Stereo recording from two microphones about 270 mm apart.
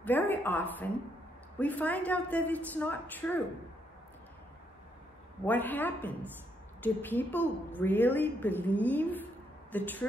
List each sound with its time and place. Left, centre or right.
0.0 s a sound: centre
1.6 s a woman's voice: centre
5.4 s a woman's voice: centre